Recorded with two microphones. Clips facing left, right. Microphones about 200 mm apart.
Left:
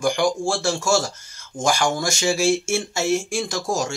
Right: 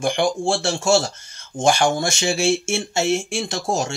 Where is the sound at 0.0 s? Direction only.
25° right (ahead or behind).